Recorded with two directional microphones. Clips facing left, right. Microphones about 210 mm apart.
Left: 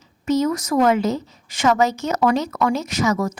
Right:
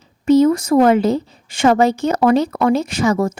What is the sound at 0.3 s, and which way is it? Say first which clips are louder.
A woman's voice: right 8 dB; 30° right (ahead or behind).